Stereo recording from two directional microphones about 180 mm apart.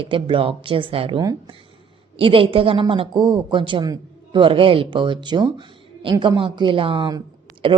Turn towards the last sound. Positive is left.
turn(degrees=-25)  # may be behind; listen again after turning